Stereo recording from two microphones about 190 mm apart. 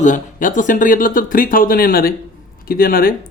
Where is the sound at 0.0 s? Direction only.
40° left (ahead or behind).